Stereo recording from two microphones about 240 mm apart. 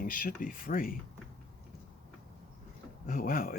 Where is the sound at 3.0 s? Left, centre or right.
Left.